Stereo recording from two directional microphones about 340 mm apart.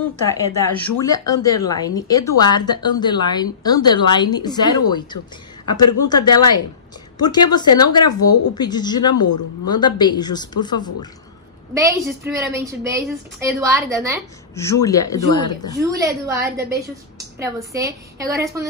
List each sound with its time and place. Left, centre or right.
0.3 s a woman's voice: centre
11.7 s a woman's voice: centre
14.5 s a woman's voice: centre
15.8 s a woman's voice: centre
16.5 s a woman's voice: right
17.4 s a woman's voice: centre